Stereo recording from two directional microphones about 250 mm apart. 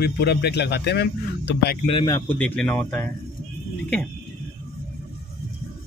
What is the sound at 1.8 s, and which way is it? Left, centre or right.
A man's voice, centre.